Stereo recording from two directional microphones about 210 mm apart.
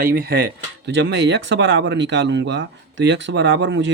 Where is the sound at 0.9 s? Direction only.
60° right (ahead or behind).